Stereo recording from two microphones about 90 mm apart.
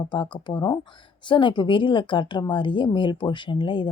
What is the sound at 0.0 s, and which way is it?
Speech, 55° left (ahead or behind).